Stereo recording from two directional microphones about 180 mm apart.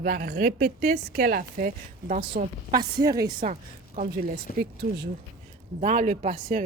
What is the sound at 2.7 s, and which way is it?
Speech, 20° right (ahead or behind).